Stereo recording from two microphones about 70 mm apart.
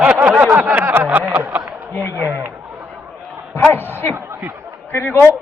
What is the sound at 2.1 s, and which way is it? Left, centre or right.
Speech, right.